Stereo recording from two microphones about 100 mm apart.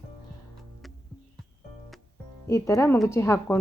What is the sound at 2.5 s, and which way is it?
A woman's voice, 30° left (ahead or behind).